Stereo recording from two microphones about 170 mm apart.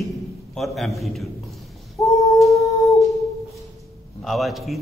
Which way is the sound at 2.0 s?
Centre (ahead or behind).